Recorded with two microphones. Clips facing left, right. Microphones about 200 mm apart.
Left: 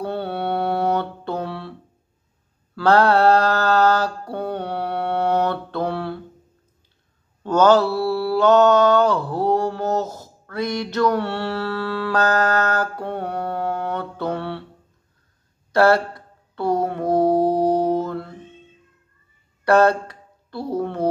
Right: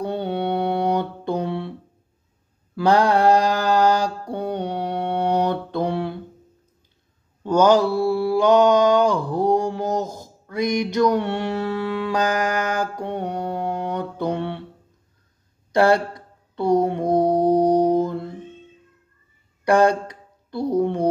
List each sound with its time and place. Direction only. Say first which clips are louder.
0.0 s a sound: right 1 dB; 15° right (ahead or behind)
2.7 s mantra: left 1 dB; 15° right (ahead or behind)
7.4 s mantra: left 1 dB; 15° right (ahead or behind)
15.7 s mantra: left 1 dB; 15° right (ahead or behind)
19.6 s speech: left 1 dB; 15° right (ahead or behind)